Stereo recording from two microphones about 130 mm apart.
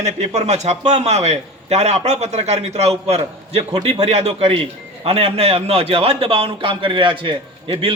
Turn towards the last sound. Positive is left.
turn(degrees=-40)  # may be behind; listen again after turning